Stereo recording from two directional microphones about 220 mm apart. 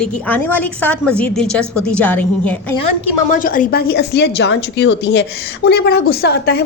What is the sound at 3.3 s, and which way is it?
A woman's voice, 40° left (ahead or behind).